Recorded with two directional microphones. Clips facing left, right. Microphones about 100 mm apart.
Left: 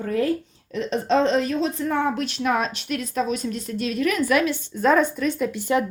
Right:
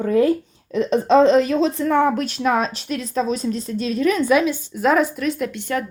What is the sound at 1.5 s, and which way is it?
Speech, 85° right.